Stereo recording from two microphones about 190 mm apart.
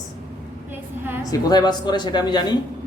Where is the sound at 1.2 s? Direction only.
20° left (ahead or behind).